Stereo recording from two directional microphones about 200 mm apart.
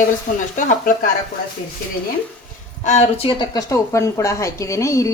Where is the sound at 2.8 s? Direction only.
30° left (ahead or behind).